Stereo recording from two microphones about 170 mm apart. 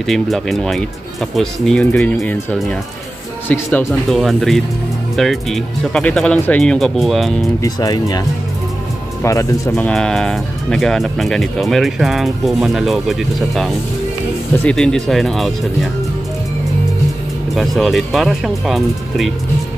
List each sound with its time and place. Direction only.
0.0 s speech: centre (ahead or behind)
3.4 s speech: 10° left (ahead or behind)
7.6 s speech: 20° left (ahead or behind)
9.2 s speech: 20° left (ahead or behind); by 15.9 s centre (ahead or behind)
17.6 s speech: centre (ahead or behind)